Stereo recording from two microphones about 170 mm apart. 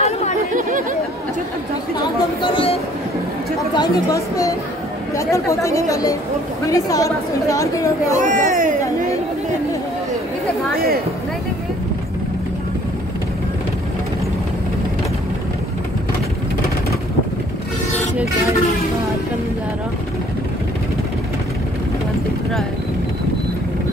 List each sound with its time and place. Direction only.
0.0 s chatter: 40° left (ahead or behind)
0.6 s chatter: 50° right (ahead or behind)
2.4 s a sound: 35° left (ahead or behind)
3.7 s speech: 20° left (ahead or behind)
8.2 s speech: 50° right (ahead or behind)